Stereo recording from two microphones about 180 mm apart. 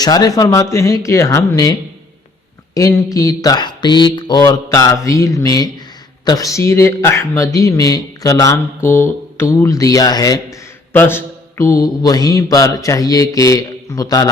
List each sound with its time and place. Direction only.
0.0 s speech: 20° left (ahead or behind)